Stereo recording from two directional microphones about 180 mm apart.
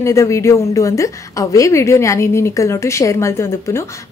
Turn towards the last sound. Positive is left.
turn(degrees=15)  # may be behind; listen again after turning